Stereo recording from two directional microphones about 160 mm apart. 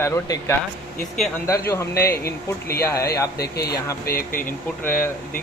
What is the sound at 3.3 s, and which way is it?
Speech, 80° left.